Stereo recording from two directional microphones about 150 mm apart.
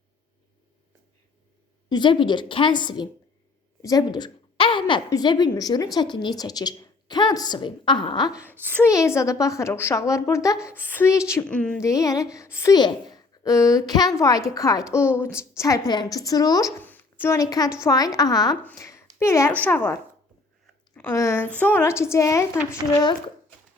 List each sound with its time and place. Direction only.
1.9 s a woman's voice: 30° left (ahead or behind)
8.4 s a woman's voice: 10° right (ahead or behind)
8.6 s a woman's voice: 20° left (ahead or behind)
11.4 s a woman's voice: 5° left (ahead or behind)
11.8 s a woman's voice: 20° left (ahead or behind)
12.7 s a woman's voice: 30° left (ahead or behind)
16.8 s a sound: 10° left (ahead or behind)
17.8 s a woman's voice: 25° left (ahead or behind)